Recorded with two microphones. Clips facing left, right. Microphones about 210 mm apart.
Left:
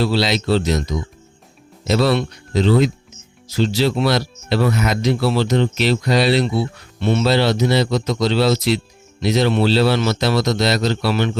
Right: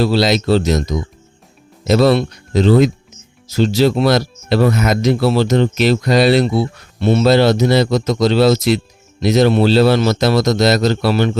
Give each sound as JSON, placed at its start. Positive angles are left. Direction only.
{"t": 0.0, "sound": "speech", "side_deg": -45}